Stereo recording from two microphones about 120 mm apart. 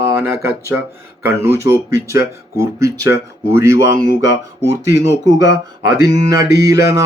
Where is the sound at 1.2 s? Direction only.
20° right (ahead or behind).